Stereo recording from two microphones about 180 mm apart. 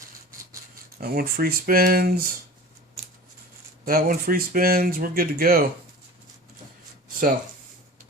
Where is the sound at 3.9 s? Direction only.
55° right (ahead or behind).